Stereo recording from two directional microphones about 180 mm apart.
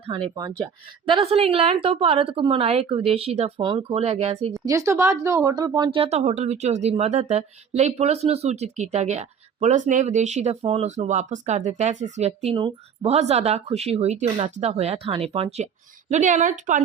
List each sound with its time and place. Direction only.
0.1 s speech: 25° right (ahead or behind)
4.6 s speech: 15° right (ahead or behind); by 16.8 s 45° right (ahead or behind)